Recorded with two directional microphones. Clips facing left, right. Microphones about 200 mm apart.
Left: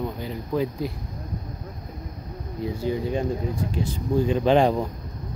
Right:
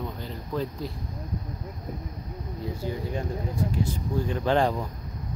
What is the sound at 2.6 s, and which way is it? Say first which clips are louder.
Speech: left 6 dB; 20° left (ahead or behind).